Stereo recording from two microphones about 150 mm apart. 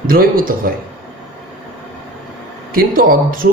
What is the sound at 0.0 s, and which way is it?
Speech, 75° right (ahead or behind).